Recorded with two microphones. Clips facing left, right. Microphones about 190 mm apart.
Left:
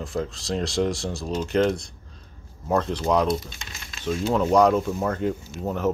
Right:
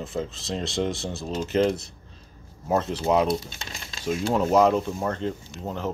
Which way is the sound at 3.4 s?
30° right (ahead or behind).